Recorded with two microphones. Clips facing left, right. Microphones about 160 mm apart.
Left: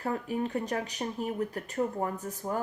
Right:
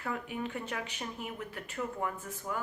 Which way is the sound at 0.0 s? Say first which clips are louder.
Left 5 dB; 35° left (ahead or behind).